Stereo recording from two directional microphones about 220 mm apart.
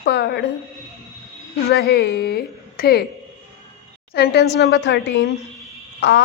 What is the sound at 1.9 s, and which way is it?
Speech, 50° left (ahead or behind).